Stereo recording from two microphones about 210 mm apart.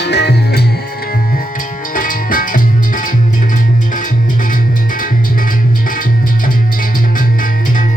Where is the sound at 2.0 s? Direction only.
40° left (ahead or behind).